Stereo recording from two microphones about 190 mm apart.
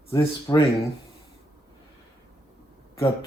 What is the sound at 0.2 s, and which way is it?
Speech, 25° left (ahead or behind).